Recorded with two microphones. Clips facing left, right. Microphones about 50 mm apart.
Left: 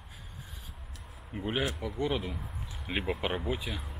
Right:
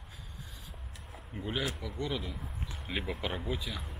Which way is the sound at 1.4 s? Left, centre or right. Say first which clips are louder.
Left 3 dB; left.